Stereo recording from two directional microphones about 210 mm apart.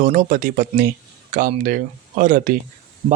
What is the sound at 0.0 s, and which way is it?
Speech, 40° right (ahead or behind).